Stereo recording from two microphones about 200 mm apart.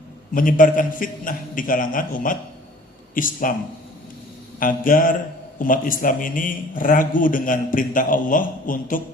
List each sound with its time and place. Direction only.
0.3 s a man's voice: 45° left (ahead or behind)
4.6 s a man's voice: 45° left (ahead or behind)